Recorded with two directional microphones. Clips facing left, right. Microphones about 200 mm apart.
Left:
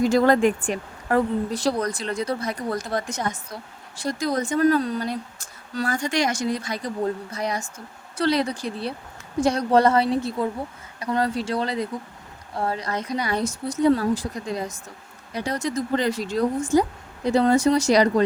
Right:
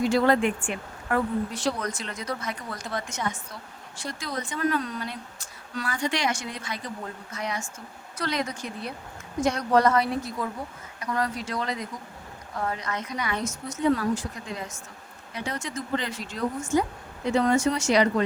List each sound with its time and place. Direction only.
0.0 s a woman's voice: 45° left (ahead or behind)